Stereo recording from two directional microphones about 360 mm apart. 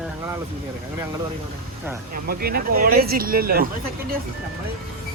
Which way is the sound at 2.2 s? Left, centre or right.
Right.